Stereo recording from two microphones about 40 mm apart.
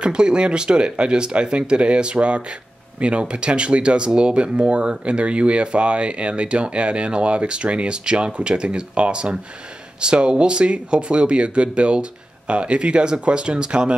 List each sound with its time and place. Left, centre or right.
0.0 s speech: right